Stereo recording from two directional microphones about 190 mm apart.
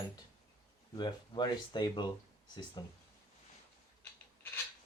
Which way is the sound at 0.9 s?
25° left (ahead or behind).